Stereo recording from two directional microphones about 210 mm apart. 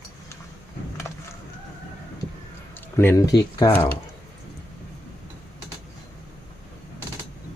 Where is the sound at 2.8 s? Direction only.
10° left (ahead or behind).